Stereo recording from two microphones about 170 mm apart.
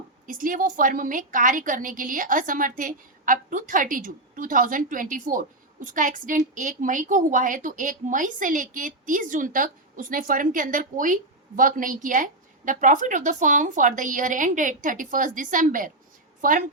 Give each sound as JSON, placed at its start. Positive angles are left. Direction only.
{"t": 0.3, "sound": "a woman's voice", "side_deg": -55}